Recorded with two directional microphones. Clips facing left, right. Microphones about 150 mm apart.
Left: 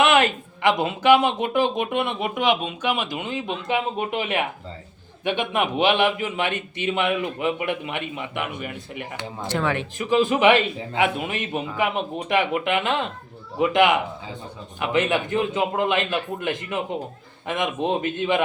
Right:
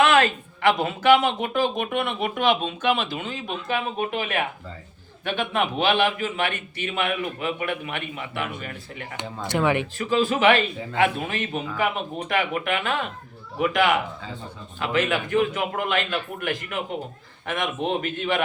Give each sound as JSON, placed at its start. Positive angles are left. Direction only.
{"t": 0.0, "sound": "speech", "side_deg": 20}
{"t": 9.5, "sound": "speech", "side_deg": -15}
{"t": 10.0, "sound": "speech", "side_deg": 20}